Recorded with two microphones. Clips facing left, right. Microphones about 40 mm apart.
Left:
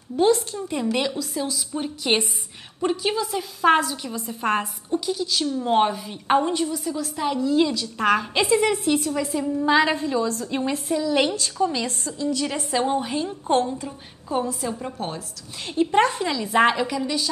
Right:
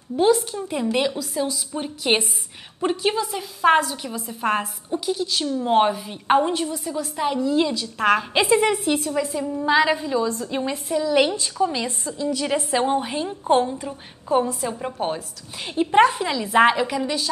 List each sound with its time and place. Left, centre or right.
0.1 s a woman's voice: centre
16.3 s a woman's voice: centre